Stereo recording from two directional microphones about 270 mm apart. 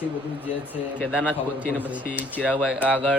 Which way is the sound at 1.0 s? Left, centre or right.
Centre.